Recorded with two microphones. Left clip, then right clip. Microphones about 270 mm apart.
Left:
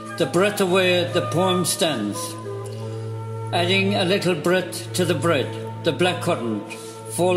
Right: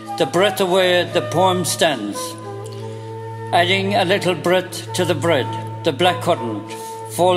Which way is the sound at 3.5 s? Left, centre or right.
Right.